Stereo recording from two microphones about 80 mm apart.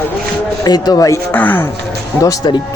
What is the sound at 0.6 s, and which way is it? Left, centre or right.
Speech, left.